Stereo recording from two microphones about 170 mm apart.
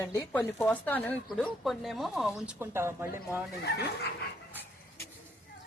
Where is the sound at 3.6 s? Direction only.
70° left (ahead or behind).